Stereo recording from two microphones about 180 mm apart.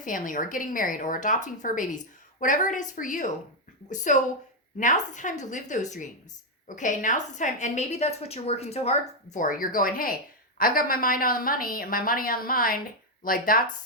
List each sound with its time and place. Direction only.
0.0 s a woman's voice: 45° left (ahead or behind)